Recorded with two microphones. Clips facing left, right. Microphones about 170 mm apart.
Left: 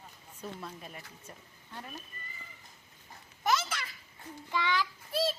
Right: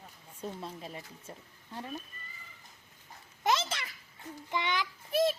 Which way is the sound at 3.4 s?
25° right (ahead or behind).